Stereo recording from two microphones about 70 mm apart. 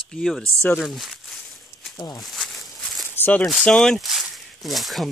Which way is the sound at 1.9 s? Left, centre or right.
Left.